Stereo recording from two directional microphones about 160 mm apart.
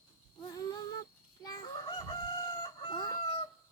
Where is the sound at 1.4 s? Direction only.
25° left (ahead or behind).